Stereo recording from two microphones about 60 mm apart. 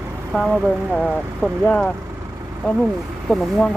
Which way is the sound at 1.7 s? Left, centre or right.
Left.